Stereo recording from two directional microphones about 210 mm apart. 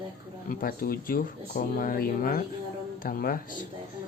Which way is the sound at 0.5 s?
45° left (ahead or behind).